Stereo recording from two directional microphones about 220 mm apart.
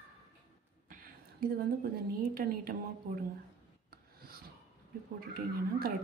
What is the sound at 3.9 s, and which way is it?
Filing, 45° right (ahead or behind).